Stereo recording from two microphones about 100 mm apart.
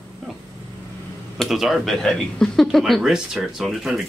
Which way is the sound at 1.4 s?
Centre (ahead or behind).